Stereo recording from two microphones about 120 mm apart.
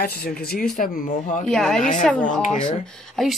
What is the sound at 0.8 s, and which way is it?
Speech, 90° left.